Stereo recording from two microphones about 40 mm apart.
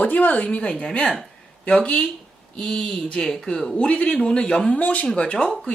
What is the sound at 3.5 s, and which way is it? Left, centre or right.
Speech, left.